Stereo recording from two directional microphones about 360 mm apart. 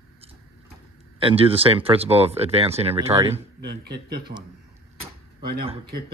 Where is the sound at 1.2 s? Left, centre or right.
Centre.